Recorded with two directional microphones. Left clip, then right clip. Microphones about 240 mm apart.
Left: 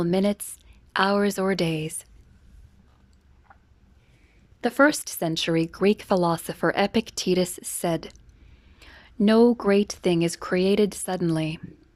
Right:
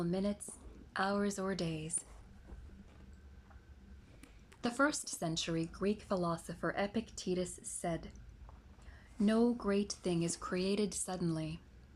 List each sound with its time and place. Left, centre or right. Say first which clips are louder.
0.0 s speech: left 14 dB; left
4.6 s speech: left 14 dB; left